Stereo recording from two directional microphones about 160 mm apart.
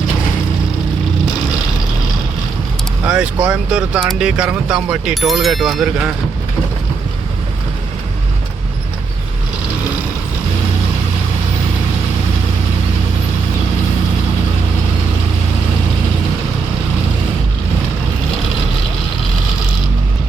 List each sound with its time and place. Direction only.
3.1 s speech: 5° right (ahead or behind)